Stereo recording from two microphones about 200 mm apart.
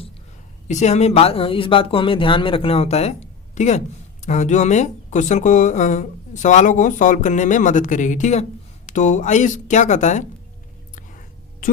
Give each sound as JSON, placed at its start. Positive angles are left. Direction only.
{"t": 0.7, "sound": "speech", "side_deg": 35}